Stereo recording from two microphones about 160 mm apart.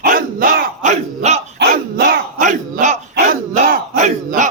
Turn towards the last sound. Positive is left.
turn(degrees=-50)  # may be behind; listen again after turning